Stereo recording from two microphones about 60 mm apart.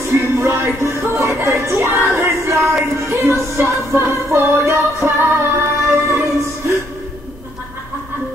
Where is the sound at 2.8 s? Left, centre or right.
Right.